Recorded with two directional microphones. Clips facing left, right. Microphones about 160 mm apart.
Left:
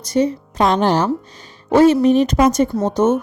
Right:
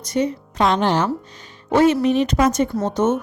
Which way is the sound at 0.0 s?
30° left (ahead or behind).